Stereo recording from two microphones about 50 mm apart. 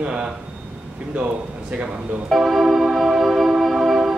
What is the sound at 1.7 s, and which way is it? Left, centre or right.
Speech, right.